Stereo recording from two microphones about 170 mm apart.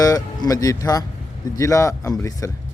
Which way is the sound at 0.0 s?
20° left (ahead or behind).